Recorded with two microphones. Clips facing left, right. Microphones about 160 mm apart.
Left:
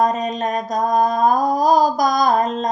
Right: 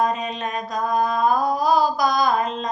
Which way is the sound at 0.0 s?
45° left (ahead or behind).